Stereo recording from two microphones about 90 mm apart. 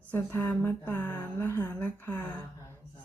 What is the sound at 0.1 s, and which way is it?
Speech, 25° left (ahead or behind).